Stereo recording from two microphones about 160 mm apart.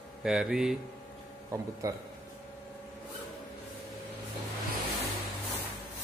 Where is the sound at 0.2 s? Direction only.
5° right (ahead or behind).